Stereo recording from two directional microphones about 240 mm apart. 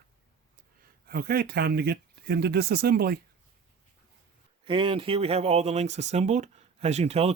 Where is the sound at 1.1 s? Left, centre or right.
Right.